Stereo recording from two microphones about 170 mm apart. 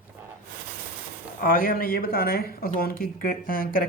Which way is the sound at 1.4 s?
55° left (ahead or behind).